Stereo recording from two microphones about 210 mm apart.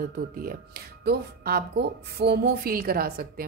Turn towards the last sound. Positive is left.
turn(degrees=-45)  # may be behind; listen again after turning